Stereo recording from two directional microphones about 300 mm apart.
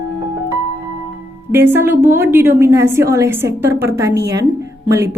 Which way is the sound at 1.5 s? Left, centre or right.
Centre.